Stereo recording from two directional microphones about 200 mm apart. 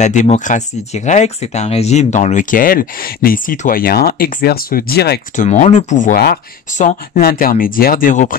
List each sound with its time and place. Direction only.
0.0 s speech: 35° left (ahead or behind); by 5.4 s 55° left (ahead or behind)
5.4 s speech: 40° left (ahead or behind)